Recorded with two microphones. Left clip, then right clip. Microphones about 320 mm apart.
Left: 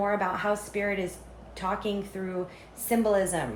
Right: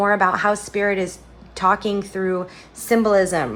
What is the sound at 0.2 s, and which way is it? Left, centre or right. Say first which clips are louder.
A woman's voice: right 10 dB; right.